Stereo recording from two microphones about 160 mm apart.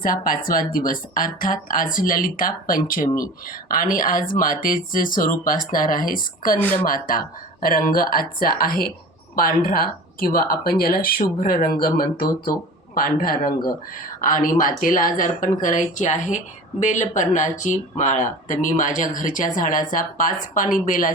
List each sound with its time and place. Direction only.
0.0 s speech: 60° left (ahead or behind)
6.6 s speech: 10° left (ahead or behind)
6.8 s speech: 60° left (ahead or behind)